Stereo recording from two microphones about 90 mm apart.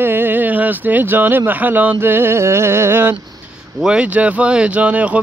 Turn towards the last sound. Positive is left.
turn(degrees=-15)  # may be behind; listen again after turning